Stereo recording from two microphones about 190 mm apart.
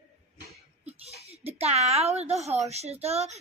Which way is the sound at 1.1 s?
35° right (ahead or behind).